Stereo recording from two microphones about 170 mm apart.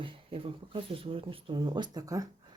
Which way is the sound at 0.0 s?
30° right (ahead or behind).